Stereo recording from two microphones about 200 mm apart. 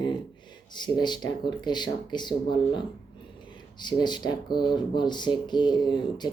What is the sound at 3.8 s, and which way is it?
Speech, 20° left (ahead or behind).